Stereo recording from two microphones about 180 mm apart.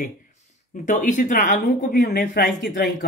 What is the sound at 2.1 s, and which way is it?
Speech, 65° left (ahead or behind).